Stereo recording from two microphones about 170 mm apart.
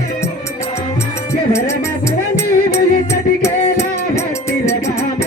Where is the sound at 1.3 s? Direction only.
15° left (ahead or behind).